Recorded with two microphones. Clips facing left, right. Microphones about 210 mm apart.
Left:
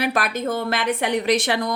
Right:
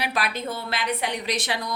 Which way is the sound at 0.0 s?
50° left (ahead or behind).